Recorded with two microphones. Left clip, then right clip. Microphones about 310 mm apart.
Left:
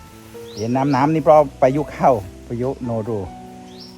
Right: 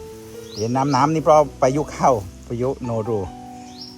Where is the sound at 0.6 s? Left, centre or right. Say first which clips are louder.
Even; left.